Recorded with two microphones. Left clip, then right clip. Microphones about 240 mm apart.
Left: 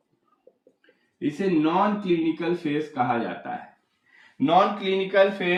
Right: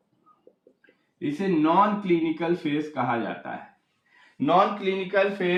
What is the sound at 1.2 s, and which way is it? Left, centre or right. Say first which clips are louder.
A man's voice: left 1 dB; centre.